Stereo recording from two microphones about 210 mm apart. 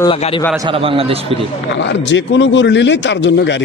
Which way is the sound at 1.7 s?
60° left (ahead or behind).